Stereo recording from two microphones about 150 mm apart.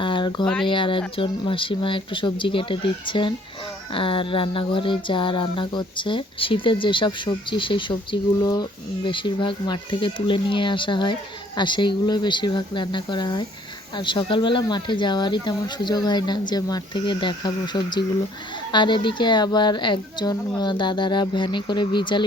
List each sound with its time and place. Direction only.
0.0 s a sound: 35° left (ahead or behind)
0.4 s speech: 5° left (ahead or behind)
0.7 s speech: 35° left (ahead or behind)